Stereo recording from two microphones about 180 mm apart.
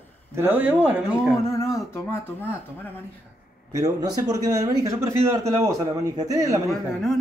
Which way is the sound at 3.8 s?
20° right (ahead or behind).